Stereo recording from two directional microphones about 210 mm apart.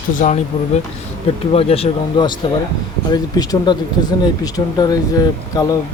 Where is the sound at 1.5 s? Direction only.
30° left (ahead or behind).